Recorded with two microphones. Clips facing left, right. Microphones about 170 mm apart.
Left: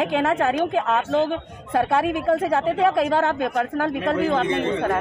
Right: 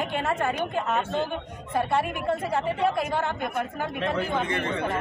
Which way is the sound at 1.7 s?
70° left (ahead or behind).